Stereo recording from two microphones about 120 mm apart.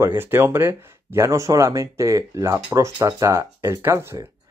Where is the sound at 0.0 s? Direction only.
20° right (ahead or behind).